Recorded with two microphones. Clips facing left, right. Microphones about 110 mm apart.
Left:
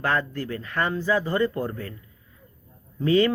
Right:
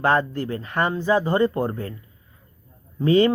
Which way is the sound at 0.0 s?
25° right (ahead or behind).